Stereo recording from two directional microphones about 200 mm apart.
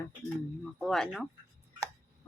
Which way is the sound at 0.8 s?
Centre (ahead or behind).